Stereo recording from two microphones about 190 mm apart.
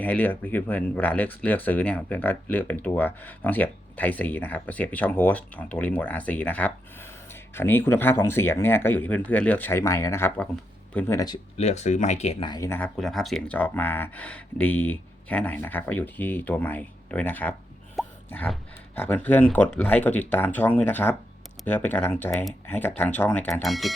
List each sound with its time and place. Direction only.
0.0 s speech: 10° left (ahead or behind)
11.5 s speech: 35° left (ahead or behind)
12.5 s speech: 15° left (ahead or behind)
13.0 s speech: centre (ahead or behind)